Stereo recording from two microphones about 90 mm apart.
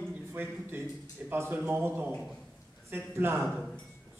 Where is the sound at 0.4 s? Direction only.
20° right (ahead or behind).